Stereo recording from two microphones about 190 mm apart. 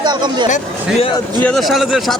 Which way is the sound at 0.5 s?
35° left (ahead or behind).